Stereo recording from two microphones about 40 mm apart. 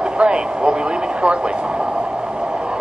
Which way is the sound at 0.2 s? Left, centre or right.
Right.